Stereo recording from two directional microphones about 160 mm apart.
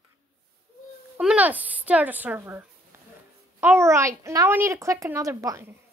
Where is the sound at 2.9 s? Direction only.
15° right (ahead or behind).